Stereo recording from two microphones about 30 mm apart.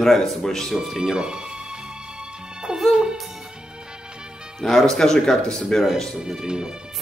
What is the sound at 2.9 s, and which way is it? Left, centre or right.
Music, right.